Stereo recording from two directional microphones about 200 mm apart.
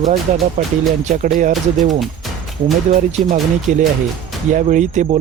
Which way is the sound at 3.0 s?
35° right (ahead or behind).